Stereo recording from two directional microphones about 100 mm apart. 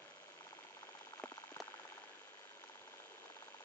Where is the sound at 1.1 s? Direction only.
30° left (ahead or behind).